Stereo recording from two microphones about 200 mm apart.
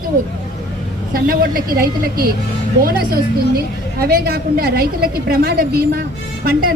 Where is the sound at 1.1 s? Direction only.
45° right (ahead or behind).